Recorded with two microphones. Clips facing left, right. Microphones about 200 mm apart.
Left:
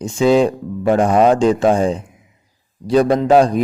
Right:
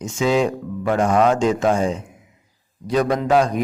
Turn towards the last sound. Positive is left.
turn(degrees=35)  # may be behind; listen again after turning